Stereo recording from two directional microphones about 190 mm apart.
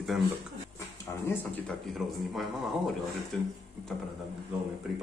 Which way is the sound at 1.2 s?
10° left (ahead or behind).